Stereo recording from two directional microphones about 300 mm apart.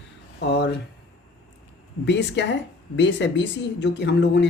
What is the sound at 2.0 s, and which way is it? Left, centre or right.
Speech, left.